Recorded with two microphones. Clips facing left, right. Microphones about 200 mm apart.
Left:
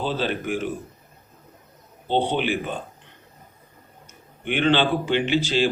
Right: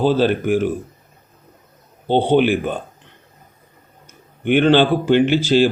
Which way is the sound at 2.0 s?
50° right (ahead or behind).